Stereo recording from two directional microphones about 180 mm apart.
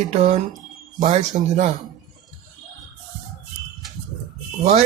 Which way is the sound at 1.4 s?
40° right (ahead or behind).